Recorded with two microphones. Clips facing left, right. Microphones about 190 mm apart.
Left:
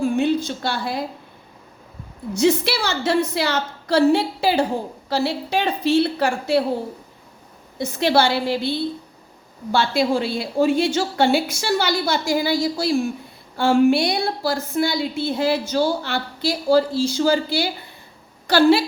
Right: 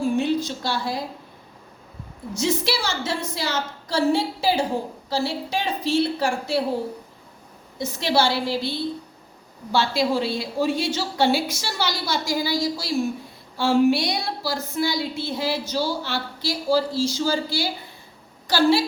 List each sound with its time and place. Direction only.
0.2 s a woman's voice: 55° left (ahead or behind)
2.3 s a woman's voice: 60° left (ahead or behind)
7.8 s a woman's voice: 60° left (ahead or behind)
9.7 s a woman's voice: 55° left (ahead or behind)